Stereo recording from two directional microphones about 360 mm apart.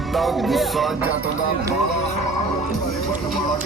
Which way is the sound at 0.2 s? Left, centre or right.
Centre.